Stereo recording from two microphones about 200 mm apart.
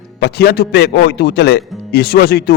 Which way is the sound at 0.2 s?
55° left (ahead or behind).